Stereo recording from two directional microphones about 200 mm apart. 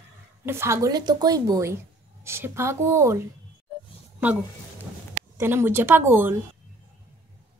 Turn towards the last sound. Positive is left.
turn(degrees=-10)  # may be behind; listen again after turning